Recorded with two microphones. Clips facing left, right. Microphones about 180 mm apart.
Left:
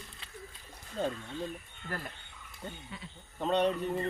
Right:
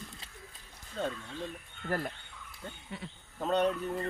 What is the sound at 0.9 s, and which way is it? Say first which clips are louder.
Speech: left 2 dB; 5° left (ahead or behind).